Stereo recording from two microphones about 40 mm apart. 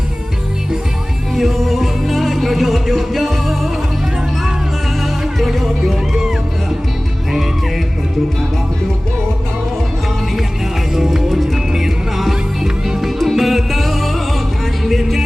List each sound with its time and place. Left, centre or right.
1.3 s music: centre
5.2 s music: centre
10.9 s music: centre
13.1 s music: centre